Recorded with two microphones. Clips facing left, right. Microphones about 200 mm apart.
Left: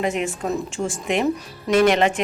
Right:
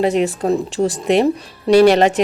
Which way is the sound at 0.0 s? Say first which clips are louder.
Right 7 dB; 35° right (ahead or behind).